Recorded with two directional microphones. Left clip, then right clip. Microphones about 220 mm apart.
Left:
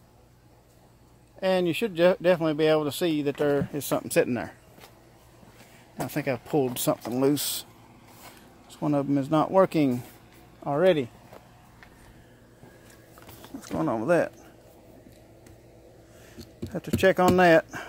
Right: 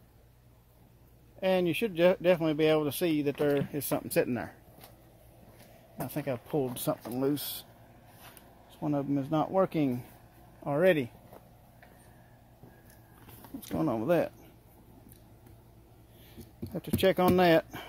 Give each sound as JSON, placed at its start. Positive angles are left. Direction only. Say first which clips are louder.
{"t": 1.4, "sound": "speech", "louder": "left 3 dB", "side_deg": 5}
{"t": 6.0, "sound": "speech", "louder": "left 5 dB", "side_deg": 25}
{"t": 8.6, "sound": "speech", "louder": "left 6 dB", "side_deg": 25}
{"t": 10.6, "sound": "speech", "louder": "left 4 dB", "side_deg": 5}
{"t": 13.6, "sound": "speech", "louder": "left 4 dB", "side_deg": -5}
{"t": 16.5, "sound": "speech", "louder": "left 4 dB", "side_deg": 5}